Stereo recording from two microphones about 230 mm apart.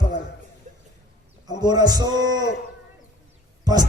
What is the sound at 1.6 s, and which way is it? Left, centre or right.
Music, centre.